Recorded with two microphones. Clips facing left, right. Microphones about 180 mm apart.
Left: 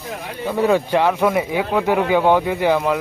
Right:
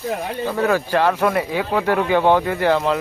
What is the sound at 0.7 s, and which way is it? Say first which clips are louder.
A man's voice: left 2 dB; 15° left (ahead or behind).